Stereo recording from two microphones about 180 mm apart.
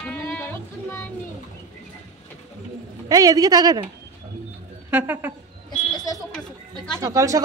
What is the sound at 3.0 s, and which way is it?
Speech, 20° right (ahead or behind).